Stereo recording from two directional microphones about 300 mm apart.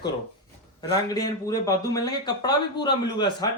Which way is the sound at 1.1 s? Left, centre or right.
Centre.